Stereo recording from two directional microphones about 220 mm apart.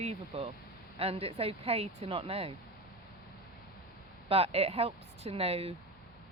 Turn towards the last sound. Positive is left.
turn(degrees=-25)  # may be behind; listen again after turning